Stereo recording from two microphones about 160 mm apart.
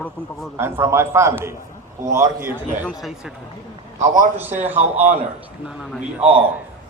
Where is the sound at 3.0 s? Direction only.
Centre (ahead or behind).